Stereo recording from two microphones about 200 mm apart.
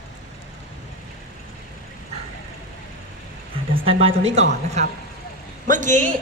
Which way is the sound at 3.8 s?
30° right (ahead or behind).